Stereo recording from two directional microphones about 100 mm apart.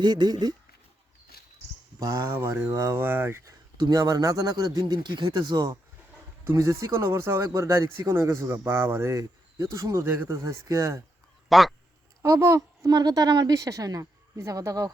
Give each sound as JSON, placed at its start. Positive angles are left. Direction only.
{"t": 0.0, "sound": "speech", "side_deg": -45}
{"t": 2.0, "sound": "speech", "side_deg": -30}
{"t": 3.8, "sound": "a woman's voice", "side_deg": -40}
{"t": 6.4, "sound": "speech", "side_deg": -25}
{"t": 11.4, "sound": "speech", "side_deg": 0}
{"t": 12.2, "sound": "a woman's voice", "side_deg": -30}